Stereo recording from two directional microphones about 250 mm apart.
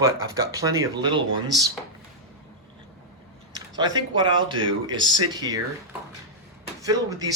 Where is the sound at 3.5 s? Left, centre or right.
Centre.